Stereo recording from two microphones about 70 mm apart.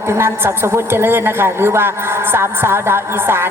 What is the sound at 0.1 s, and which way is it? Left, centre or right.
Speech, right.